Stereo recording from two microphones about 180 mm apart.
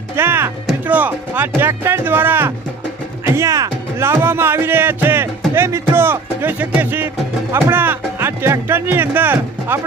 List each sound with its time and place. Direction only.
0.2 s music: 10° right (ahead or behind)
0.9 s speech: 10° right (ahead or behind)